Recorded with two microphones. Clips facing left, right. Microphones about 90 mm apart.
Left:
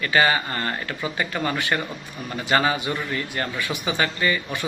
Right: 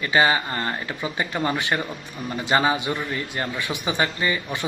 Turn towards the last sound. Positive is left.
turn(degrees=-20)  # may be behind; listen again after turning